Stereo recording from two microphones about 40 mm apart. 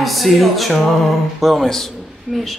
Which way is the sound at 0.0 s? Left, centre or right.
Centre.